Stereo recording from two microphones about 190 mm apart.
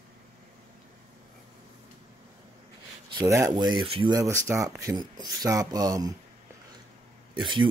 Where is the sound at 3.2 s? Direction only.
20° right (ahead or behind).